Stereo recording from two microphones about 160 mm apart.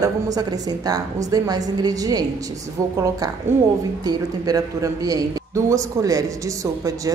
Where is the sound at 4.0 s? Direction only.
25° right (ahead or behind).